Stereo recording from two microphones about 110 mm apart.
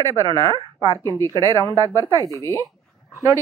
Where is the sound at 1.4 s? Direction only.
30° right (ahead or behind).